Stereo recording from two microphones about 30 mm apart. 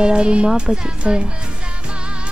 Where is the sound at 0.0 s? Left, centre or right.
Right.